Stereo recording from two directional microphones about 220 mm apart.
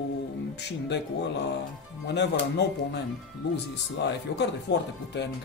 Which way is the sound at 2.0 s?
50° left (ahead or behind).